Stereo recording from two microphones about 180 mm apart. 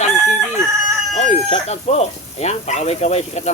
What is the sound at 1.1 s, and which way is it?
Chicken, 40° left (ahead or behind).